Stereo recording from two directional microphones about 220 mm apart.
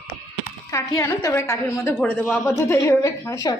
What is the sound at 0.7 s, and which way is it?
A woman's voice, 15° left (ahead or behind).